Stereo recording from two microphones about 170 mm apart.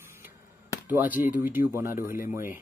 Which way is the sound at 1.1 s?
50° left (ahead or behind).